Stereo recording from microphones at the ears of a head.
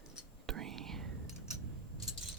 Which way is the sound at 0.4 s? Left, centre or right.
Right.